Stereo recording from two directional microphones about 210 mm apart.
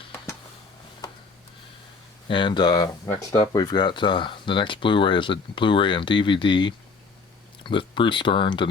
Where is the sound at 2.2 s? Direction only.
25° left (ahead or behind).